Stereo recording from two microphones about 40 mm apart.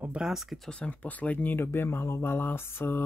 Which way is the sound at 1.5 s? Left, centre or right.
Left.